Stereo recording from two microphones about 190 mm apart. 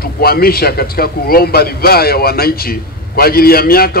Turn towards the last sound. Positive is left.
turn(degrees=50)  # may be behind; listen again after turning